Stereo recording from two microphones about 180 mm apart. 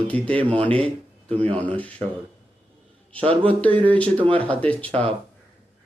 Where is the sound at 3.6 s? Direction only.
10° left (ahead or behind).